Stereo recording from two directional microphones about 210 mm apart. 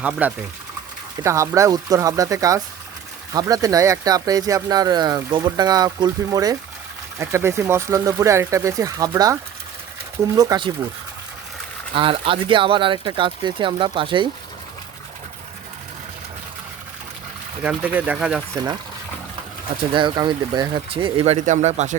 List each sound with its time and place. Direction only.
0.0 s speech: 5° right (ahead or behind)
11.9 s speech: 25° right (ahead or behind)
17.6 s speech: 5° right (ahead or behind)
18.5 s speech: 15° right (ahead or behind)
19.9 s speech: 20° right (ahead or behind)